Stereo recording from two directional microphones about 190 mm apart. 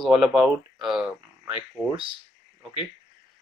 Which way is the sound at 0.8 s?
Centre (ahead or behind).